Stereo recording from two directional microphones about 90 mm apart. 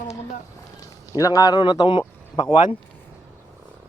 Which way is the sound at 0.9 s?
40° left (ahead or behind).